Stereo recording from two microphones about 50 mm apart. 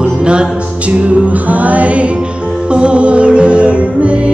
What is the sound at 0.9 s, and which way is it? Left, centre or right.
Music, right.